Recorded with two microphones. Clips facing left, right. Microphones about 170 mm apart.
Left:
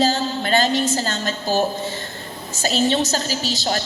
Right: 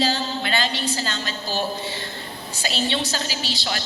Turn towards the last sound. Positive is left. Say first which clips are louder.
# left 5 dB
turn(degrees=45)  # may be behind; listen again after turning